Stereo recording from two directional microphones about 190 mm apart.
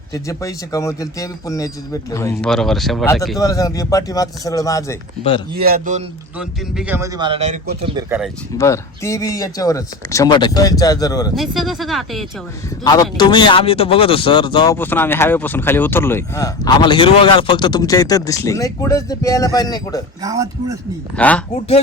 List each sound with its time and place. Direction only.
0.1 s speech: 15° left (ahead or behind); by 3.1 s centre (ahead or behind)
3.3 s speech: 20° left (ahead or behind)
5.6 s a man's voice: 45° right (ahead or behind)
6.4 s a man's voice: 5° right (ahead or behind); by 7.6 s 35° right (ahead or behind)
8.5 s speech: 15° left (ahead or behind)
11.3 s speech: centre (ahead or behind)
12.8 s speech: 20° left (ahead or behind)
14.8 s speech: 10° left (ahead or behind)
20.2 s speech: 20° right (ahead or behind)
21.2 s speech: 10° left (ahead or behind)